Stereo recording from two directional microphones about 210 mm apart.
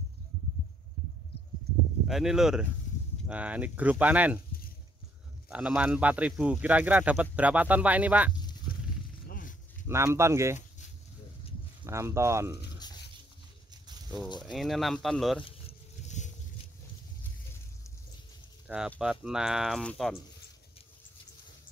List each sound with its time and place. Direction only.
2.0 s speech: centre (ahead or behind)
5.5 s speech: 5° right (ahead or behind)
9.3 s zipper: 40° left (ahead or behind)
9.8 s speech: 10° right (ahead or behind)
11.8 s speech: 15° right (ahead or behind)
12.7 s a sound: 20° left (ahead or behind)
14.4 s speech: centre (ahead or behind)
18.9 s speech: 5° right (ahead or behind)